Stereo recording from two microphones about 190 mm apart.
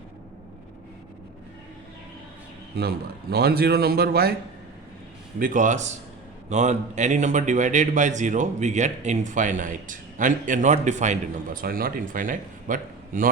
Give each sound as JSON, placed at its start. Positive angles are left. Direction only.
{"t": 2.7, "sound": "a man's voice", "side_deg": -55}
{"t": 5.4, "sound": "a man's voice", "side_deg": -45}